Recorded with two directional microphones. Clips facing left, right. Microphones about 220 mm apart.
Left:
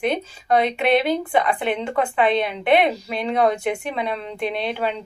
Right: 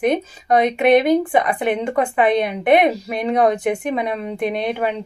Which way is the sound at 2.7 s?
50° right (ahead or behind).